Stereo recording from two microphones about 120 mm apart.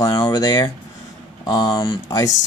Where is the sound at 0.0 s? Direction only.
35° left (ahead or behind).